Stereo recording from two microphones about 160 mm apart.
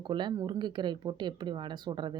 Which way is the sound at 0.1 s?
30° right (ahead or behind).